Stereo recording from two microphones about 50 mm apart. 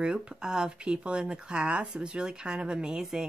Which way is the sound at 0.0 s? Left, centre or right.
Centre.